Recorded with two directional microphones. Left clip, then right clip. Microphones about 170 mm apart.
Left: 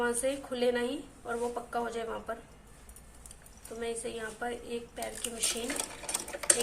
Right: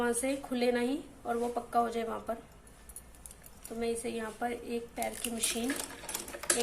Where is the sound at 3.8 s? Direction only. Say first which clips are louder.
Right 2 dB; 25° right (ahead or behind).